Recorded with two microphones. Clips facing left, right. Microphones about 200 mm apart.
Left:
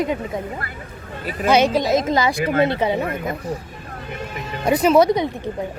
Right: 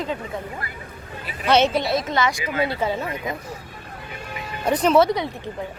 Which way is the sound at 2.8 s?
20° left (ahead or behind).